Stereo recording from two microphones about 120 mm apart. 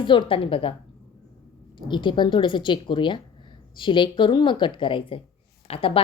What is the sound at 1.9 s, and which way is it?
A woman's voice, 40° left (ahead or behind).